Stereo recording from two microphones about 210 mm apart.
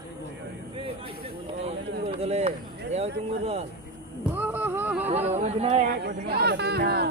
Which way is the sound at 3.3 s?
30° right (ahead or behind).